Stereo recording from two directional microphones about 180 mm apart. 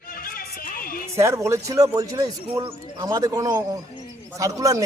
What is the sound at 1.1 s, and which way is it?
A man's voice, 15° right (ahead or behind).